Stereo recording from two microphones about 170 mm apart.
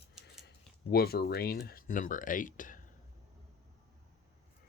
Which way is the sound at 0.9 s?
65° left (ahead or behind).